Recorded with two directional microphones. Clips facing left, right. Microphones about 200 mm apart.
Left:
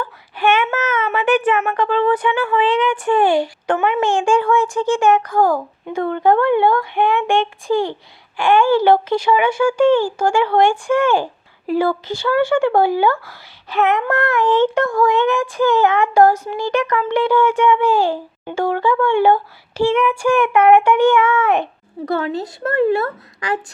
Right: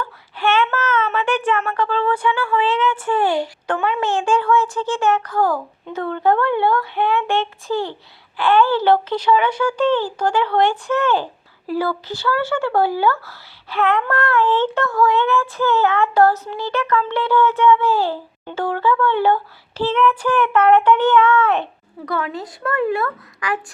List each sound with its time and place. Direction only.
0.0 s a sound: 10° left (ahead or behind)
1.5 s speech: 15° left (ahead or behind)
22.0 s speech: 25° left (ahead or behind)